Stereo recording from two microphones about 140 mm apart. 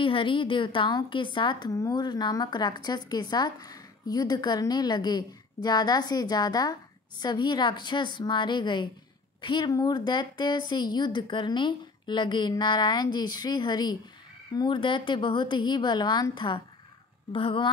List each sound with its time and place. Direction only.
0.0 s a woman's voice: 40° left (ahead or behind)